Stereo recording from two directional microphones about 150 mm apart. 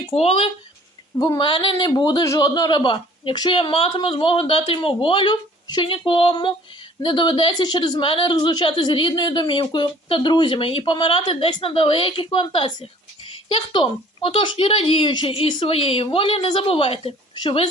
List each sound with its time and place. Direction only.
0.1 s a woman's voice: 40° left (ahead or behind)
1.2 s a woman's voice: 30° left (ahead or behind)